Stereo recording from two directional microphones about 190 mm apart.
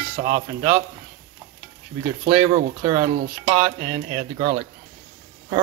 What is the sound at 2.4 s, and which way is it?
Speech, 30° right (ahead or behind).